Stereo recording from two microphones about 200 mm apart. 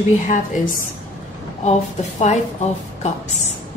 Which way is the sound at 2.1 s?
35° left (ahead or behind).